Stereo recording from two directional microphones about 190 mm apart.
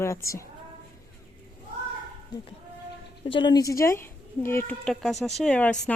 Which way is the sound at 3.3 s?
25° left (ahead or behind).